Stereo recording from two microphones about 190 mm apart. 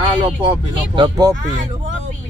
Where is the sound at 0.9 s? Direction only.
25° right (ahead or behind).